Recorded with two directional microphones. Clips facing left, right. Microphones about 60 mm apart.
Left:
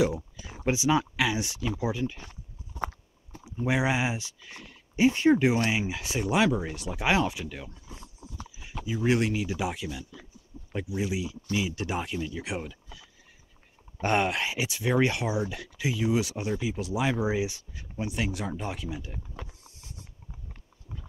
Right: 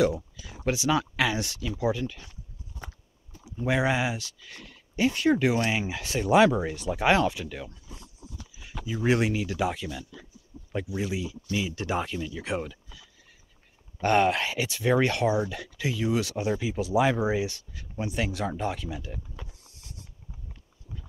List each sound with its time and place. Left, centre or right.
0.0 s speech: left
1.1 s speech: centre
3.5 s speech: centre
5.7 s speech: centre
8.9 s speech: centre
16.6 s speech: centre
17.4 s speech: centre
17.9 s speech: centre